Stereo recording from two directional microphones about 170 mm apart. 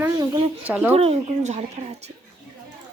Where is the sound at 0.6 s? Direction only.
10° right (ahead or behind).